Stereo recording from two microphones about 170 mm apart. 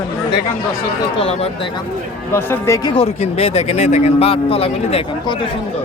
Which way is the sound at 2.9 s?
35° left (ahead or behind).